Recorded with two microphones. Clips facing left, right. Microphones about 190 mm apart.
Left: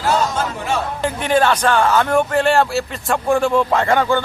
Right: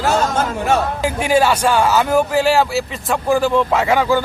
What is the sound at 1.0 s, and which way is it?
Speech, 5° right (ahead or behind).